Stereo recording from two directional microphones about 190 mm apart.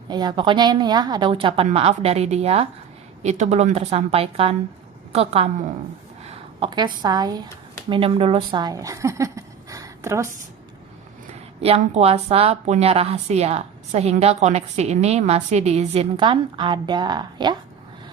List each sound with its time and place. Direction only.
0.1 s a woman's voice: 20° right (ahead or behind)
11.6 s a woman's voice: 30° right (ahead or behind)